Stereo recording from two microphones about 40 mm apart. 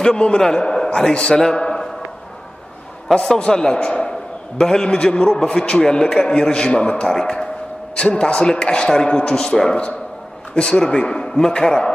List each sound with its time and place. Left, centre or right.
0.0 s a man's voice: left
3.1 s a man's voice: centre
10.5 s speech: left